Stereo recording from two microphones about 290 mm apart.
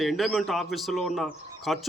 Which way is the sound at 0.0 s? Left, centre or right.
Centre.